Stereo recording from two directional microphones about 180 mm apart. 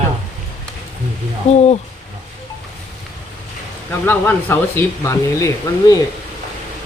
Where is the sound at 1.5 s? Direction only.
35° left (ahead or behind).